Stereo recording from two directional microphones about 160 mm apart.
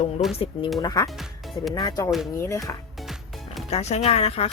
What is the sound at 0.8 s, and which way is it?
Speech, 25° left (ahead or behind).